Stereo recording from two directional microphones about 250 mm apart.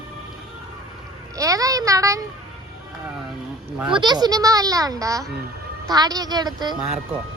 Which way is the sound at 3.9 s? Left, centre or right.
Centre.